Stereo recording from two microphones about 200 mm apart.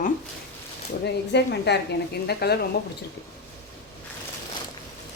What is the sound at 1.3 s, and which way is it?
Speech, 55° left (ahead or behind).